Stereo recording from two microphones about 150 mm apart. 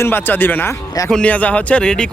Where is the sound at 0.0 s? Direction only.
15° left (ahead or behind).